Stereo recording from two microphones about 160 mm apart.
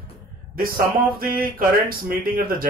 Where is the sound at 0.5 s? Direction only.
65° right (ahead or behind).